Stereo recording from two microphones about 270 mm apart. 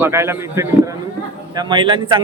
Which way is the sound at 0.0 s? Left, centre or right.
Centre.